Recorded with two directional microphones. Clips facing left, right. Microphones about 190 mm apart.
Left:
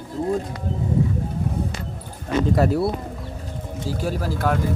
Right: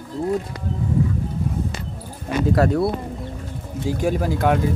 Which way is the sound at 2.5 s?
Centre (ahead or behind).